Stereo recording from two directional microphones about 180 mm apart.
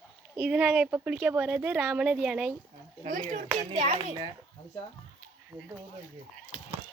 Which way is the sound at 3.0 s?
40° right (ahead or behind).